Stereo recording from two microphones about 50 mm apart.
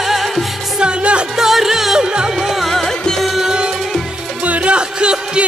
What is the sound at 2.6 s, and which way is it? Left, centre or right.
Music, centre.